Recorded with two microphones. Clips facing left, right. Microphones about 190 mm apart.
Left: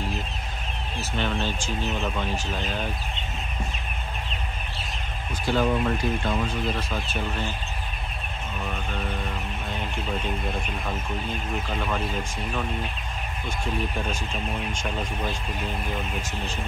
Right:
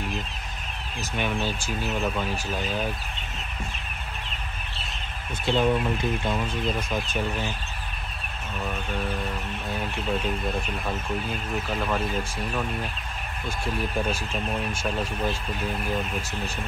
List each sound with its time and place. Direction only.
1.1 s speech: 10° right (ahead or behind)
5.4 s speech: 25° right (ahead or behind)